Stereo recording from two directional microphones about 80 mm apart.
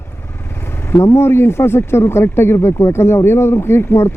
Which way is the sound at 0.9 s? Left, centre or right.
Left.